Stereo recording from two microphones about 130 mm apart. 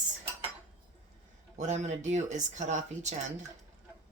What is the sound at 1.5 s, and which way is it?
Speech, 65° right (ahead or behind).